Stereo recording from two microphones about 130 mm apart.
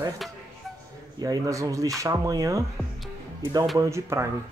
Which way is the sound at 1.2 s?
30° right (ahead or behind).